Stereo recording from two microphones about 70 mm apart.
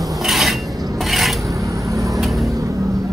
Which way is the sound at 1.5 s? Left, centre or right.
Right.